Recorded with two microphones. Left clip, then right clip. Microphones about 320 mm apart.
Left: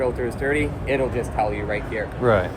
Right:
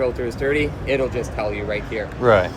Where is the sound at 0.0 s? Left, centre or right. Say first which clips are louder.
Right 2 dB; right.